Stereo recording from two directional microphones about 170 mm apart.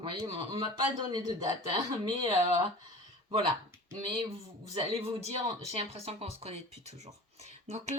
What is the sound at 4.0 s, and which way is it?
Speech, 30° right (ahead or behind).